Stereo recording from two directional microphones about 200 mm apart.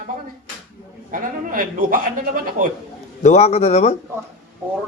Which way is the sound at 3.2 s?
35° left (ahead or behind).